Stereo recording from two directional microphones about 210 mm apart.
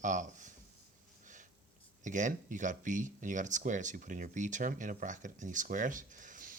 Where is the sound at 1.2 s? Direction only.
35° right (ahead or behind).